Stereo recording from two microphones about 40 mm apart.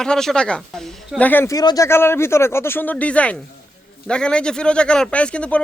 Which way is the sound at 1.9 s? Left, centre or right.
Left.